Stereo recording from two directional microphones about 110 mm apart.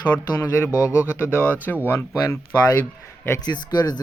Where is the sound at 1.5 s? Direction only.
15° left (ahead or behind).